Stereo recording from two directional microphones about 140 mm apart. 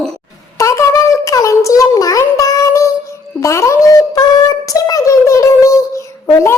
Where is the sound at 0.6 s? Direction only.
20° left (ahead or behind).